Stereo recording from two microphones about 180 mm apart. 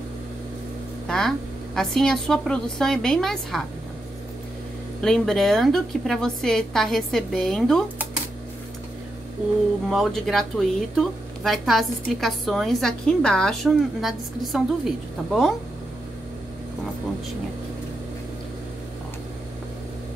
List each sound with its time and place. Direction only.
1.0 s speech: 5° left (ahead or behind)
5.0 s speech: 5° left (ahead or behind)
9.8 s speech: centre (ahead or behind)